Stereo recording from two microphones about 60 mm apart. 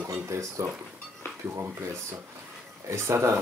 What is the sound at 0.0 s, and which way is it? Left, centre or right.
Speech, right.